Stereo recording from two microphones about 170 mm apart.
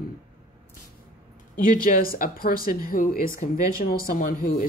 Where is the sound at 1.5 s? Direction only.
55° left (ahead or behind).